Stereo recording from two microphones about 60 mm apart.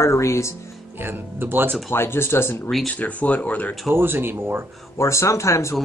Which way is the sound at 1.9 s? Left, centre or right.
Left.